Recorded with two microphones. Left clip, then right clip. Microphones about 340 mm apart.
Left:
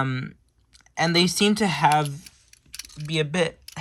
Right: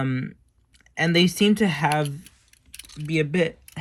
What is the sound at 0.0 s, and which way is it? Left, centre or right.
Speech, centre.